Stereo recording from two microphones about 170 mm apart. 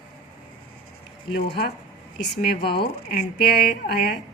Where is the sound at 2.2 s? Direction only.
90° left.